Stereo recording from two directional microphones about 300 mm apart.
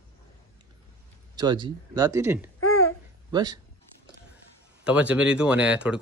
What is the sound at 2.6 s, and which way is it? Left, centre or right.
Babbling, left.